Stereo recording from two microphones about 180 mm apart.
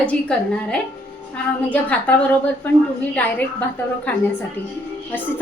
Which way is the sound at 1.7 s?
10° left (ahead or behind).